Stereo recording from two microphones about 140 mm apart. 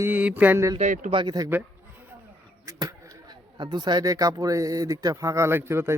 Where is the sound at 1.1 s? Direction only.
30° right (ahead or behind).